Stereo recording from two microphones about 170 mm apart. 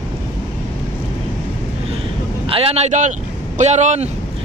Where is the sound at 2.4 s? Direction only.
35° right (ahead or behind).